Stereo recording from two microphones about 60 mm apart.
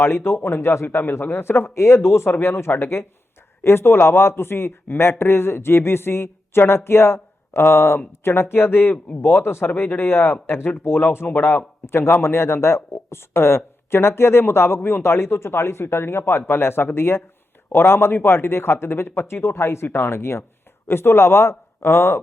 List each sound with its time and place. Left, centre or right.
0.0 s speech: left
0.9 s speech: left